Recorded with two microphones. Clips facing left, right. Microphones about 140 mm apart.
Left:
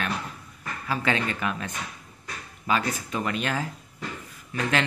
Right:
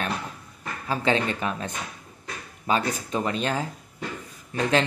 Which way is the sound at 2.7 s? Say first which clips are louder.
Right 2 dB; 30° right (ahead or behind).